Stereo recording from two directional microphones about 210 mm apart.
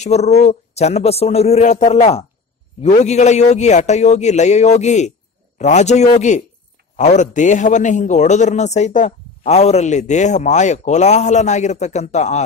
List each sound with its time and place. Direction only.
0.0 s a man's voice: 30° left (ahead or behind)